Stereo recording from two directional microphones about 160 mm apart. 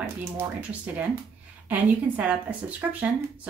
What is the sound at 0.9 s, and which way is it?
Speech, 10° right (ahead or behind).